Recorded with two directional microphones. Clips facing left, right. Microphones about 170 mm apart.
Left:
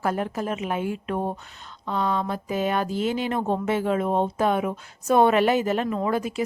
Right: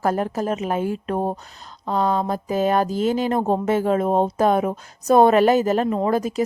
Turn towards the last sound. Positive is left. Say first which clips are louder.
# right 4 dB
turn(degrees=-40)  # may be behind; listen again after turning